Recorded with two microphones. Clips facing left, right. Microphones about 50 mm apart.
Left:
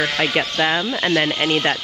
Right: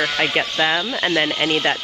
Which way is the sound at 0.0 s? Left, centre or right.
Right.